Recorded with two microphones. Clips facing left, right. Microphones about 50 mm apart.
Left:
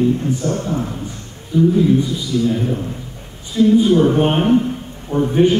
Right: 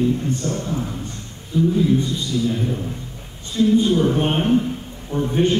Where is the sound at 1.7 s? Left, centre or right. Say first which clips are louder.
Left 4 dB; centre.